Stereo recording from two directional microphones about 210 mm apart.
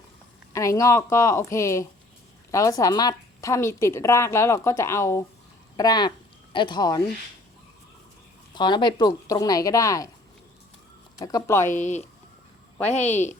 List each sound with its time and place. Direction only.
0.5 s a woman's voice: 15° left (ahead or behind)
8.5 s a woman's voice: 20° left (ahead or behind)
11.2 s a woman's voice: 15° left (ahead or behind)
11.7 s a woman's voice: 35° left (ahead or behind)